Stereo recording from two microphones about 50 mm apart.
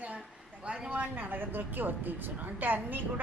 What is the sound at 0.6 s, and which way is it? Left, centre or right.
Speech, centre.